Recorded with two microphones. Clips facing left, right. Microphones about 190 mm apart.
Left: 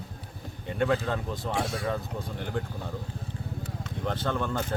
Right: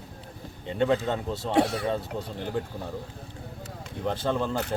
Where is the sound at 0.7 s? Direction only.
25° right (ahead or behind).